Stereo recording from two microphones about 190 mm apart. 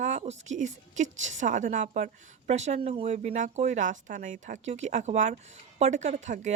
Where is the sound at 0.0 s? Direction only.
35° right (ahead or behind).